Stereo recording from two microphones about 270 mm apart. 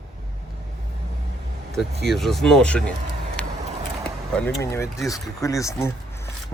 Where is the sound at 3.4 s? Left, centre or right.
Centre.